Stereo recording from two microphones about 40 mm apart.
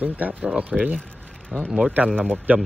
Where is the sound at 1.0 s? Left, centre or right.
Left.